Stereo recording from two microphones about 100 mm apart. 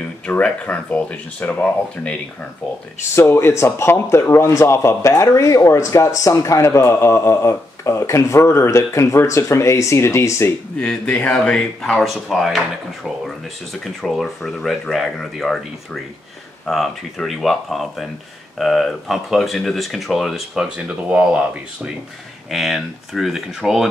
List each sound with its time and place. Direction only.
0.0 s speech: 15° left (ahead or behind)
3.2 s speech: 25° left (ahead or behind)
10.8 s speech: 10° left (ahead or behind)
13.7 s speech: centre (ahead or behind)